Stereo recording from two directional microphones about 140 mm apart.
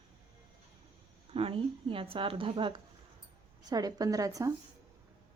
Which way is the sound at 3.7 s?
25° right (ahead or behind).